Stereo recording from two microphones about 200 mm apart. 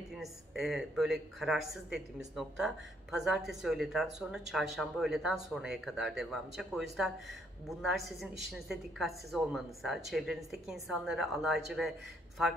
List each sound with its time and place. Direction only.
0.1 s speech: centre (ahead or behind)